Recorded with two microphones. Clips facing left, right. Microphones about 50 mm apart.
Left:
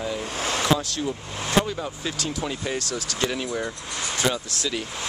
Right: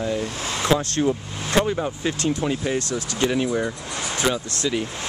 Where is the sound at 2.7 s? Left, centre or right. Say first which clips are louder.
Right 4 dB; right.